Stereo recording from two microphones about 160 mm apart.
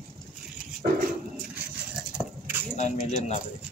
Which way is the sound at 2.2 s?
15° right (ahead or behind).